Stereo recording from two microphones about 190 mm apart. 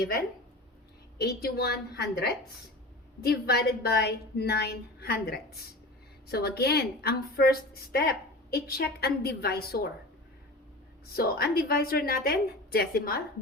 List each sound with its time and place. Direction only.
1.2 s a woman's voice: 55° left (ahead or behind)
3.2 s a woman's voice: 55° left (ahead or behind)
11.0 s a woman's voice: 50° left (ahead or behind)